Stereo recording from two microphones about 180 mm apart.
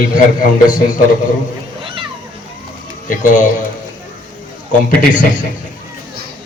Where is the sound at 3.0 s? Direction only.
45° left (ahead or behind).